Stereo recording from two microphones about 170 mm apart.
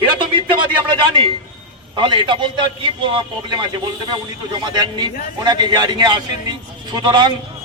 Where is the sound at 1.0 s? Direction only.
30° right (ahead or behind).